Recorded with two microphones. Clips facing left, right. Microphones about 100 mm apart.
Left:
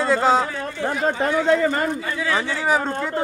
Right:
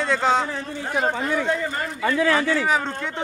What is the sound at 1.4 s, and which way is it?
Speech, 80° left.